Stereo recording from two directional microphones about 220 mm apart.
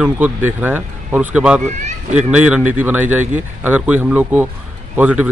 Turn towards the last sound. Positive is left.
turn(degrees=-5)  # may be behind; listen again after turning